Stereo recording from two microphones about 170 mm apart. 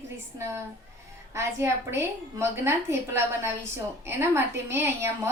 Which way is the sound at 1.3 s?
15° right (ahead or behind).